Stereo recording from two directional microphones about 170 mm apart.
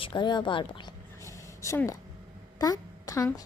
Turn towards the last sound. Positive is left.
turn(degrees=20)  # may be behind; listen again after turning